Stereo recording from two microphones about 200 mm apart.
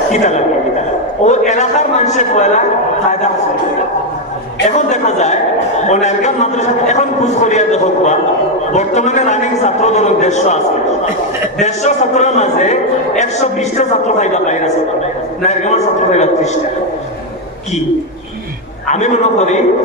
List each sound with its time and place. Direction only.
0.1 s a man's voice: 35° left (ahead or behind)
4.6 s a man's voice: 35° left (ahead or behind)
11.6 s a man's voice: 35° left (ahead or behind)
18.9 s a man's voice: 35° left (ahead or behind)